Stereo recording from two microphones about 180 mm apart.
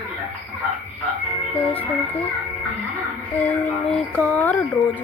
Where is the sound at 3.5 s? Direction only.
5° left (ahead or behind).